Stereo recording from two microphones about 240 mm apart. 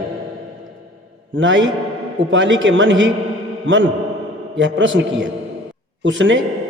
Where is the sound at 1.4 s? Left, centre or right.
Right.